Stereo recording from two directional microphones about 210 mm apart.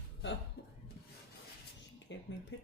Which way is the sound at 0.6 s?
50° left (ahead or behind).